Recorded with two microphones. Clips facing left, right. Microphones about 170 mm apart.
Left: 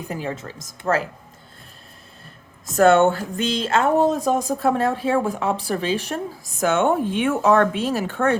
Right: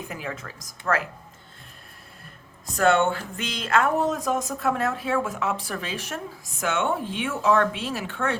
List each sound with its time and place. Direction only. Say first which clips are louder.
0.1 s a woman's voice: left 6 dB; 30° left (ahead or behind)
2.7 s speech: left 6 dB; 40° left (ahead or behind)